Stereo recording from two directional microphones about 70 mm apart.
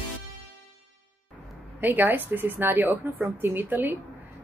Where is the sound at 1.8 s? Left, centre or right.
Right.